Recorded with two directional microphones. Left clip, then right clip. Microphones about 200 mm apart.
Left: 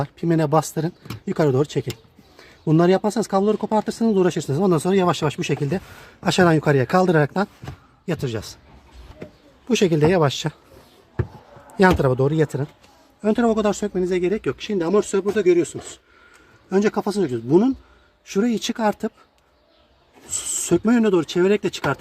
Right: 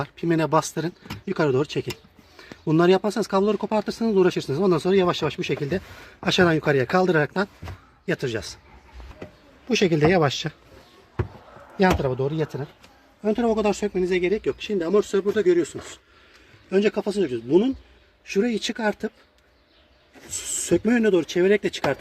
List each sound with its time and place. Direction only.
0.0 s speech: 20° left (ahead or behind)
9.6 s speech: 20° left (ahead or behind)
11.8 s speech: 35° left (ahead or behind)
13.2 s speech: 20° left (ahead or behind)
14.9 s speech: 15° left (ahead or behind)
16.6 s speech: 25° left (ahead or behind)
20.3 s speech: 25° left (ahead or behind)